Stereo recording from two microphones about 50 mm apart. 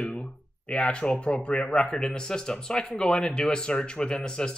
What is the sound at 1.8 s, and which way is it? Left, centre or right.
Speech, centre.